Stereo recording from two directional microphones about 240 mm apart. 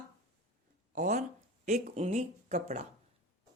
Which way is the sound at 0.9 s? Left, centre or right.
Right.